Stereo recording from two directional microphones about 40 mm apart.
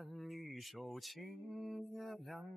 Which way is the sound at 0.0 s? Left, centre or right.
Centre.